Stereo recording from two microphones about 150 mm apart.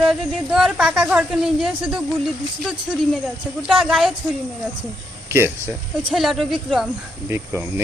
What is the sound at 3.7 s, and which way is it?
Speech, centre (ahead or behind).